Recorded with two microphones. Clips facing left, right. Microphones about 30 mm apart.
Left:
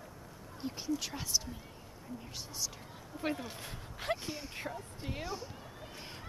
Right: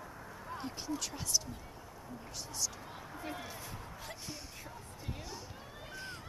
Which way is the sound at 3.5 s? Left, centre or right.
Left.